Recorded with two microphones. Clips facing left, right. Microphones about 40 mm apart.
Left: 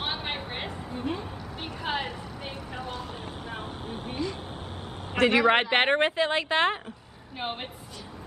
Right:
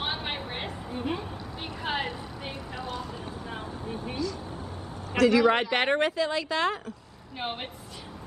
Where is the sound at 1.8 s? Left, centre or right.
Centre.